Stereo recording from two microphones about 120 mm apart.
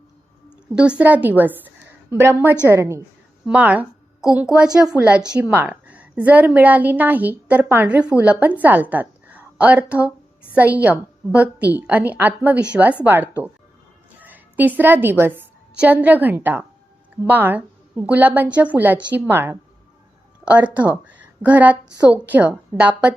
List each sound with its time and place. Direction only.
0.8 s a woman's voice: 10° right (ahead or behind)
14.2 s a sound: 15° right (ahead or behind)
14.8 s a woman's voice: 15° right (ahead or behind)